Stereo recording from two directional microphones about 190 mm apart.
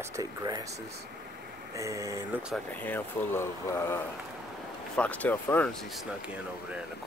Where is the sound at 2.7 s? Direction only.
10° left (ahead or behind).